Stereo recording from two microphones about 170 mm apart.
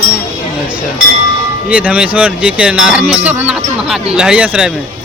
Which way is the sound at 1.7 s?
10° right (ahead or behind).